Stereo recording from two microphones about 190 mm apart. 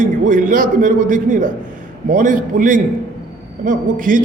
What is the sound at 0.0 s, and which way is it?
A man's voice, 45° right (ahead or behind).